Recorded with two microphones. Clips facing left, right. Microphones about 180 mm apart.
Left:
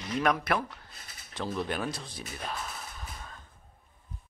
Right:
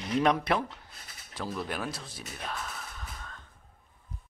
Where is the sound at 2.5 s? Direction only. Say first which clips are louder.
Even; 10° left (ahead or behind).